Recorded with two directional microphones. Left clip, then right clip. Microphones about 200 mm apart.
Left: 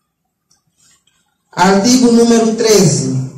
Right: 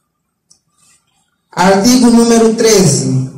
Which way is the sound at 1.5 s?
40° right (ahead or behind).